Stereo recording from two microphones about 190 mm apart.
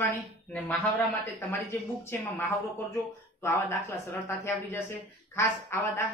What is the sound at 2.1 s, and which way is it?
Speech, 10° left (ahead or behind).